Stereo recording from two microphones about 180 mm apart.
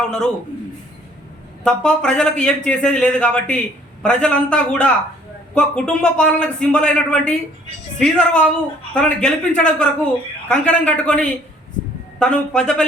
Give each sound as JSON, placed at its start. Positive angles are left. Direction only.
{"t": 0.0, "sound": "a man's voice", "side_deg": 5}
{"t": 1.6, "sound": "speech", "side_deg": 5}